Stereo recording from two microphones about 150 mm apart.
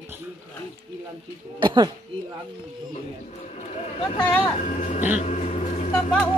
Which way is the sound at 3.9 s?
30° left (ahead or behind).